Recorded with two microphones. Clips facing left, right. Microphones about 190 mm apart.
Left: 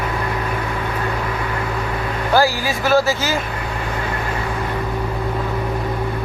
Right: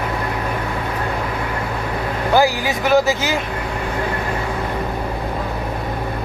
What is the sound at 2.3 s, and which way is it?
Speech, 15° right (ahead or behind).